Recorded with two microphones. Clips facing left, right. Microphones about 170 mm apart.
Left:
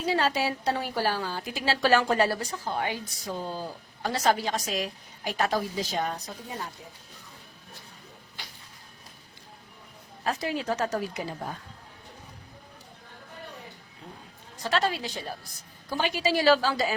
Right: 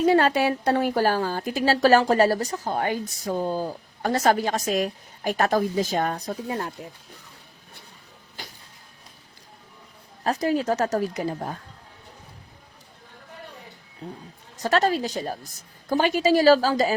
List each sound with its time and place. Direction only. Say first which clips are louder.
0.0 s a woman's voice: right 7 dB; 55° right (ahead or behind)
8.4 s a sound: right 6 dB; 45° right (ahead or behind)
10.2 s a woman's voice: right 6 dB; 40° right (ahead or behind)
14.6 s a woman's voice: right 6 dB; 45° right (ahead or behind)